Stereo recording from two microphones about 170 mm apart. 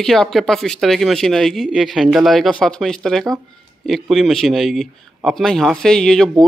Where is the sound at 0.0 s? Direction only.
5° left (ahead or behind).